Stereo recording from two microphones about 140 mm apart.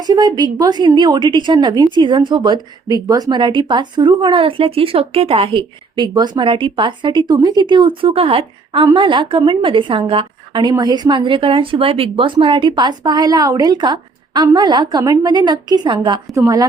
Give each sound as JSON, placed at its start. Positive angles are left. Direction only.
{"t": 0.0, "sound": "a woman's voice", "side_deg": -30}
{"t": 16.3, "sound": "a woman's voice", "side_deg": -25}